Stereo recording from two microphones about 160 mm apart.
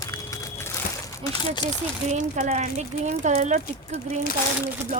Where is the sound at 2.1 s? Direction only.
50° right (ahead or behind).